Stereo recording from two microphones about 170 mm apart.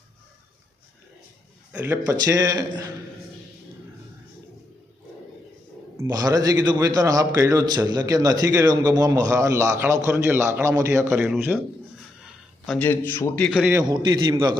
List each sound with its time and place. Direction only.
1.7 s a man's voice: 10° right (ahead or behind)
6.0 s a man's voice: 20° right (ahead or behind)
11.3 s speech: 5° right (ahead or behind)
12.8 s a man's voice: 10° left (ahead or behind)
13.5 s speech: 5° right (ahead or behind)
13.7 s a man's voice: 25° right (ahead or behind)